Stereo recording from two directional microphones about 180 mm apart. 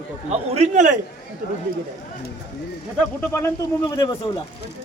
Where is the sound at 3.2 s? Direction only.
15° left (ahead or behind).